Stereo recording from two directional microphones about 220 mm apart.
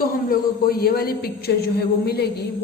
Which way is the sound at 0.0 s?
40° left (ahead or behind).